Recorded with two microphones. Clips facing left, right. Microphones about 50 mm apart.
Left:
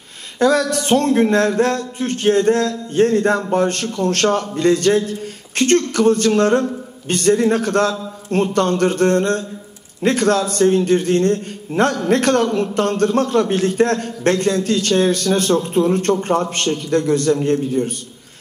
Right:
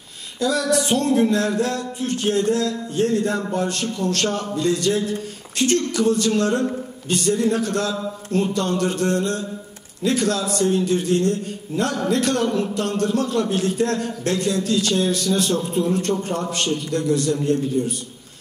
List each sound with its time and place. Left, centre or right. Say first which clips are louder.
0.4 s a man's voice: left 4 dB; left